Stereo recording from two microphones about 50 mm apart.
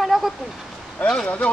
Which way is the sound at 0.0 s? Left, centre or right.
Centre.